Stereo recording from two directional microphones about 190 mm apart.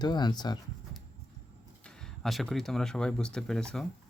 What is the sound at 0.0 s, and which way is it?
Speech, 20° left (ahead or behind).